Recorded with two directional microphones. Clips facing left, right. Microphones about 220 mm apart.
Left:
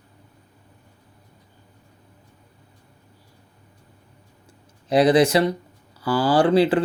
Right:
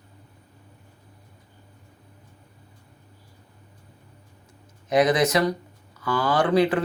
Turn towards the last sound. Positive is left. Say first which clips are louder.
# left 3 dB
turn(degrees=30)  # may be behind; listen again after turning